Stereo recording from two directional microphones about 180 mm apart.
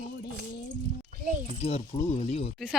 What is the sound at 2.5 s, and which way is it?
Speech, 5° right (ahead or behind).